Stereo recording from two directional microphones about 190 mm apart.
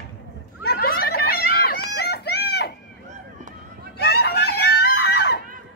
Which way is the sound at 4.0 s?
60° left (ahead or behind).